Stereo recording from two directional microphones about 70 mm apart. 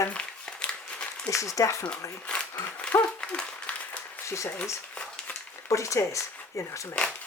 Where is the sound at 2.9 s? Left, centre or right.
Left.